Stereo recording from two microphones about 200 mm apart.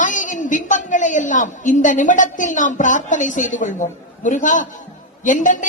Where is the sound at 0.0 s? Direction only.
40° left (ahead or behind).